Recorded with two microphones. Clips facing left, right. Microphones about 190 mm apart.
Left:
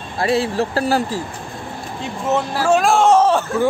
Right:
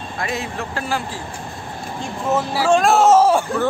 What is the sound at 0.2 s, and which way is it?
Speech, 30° left (ahead or behind).